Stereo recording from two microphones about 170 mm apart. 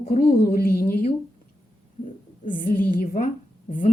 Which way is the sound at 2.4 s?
50° left (ahead or behind).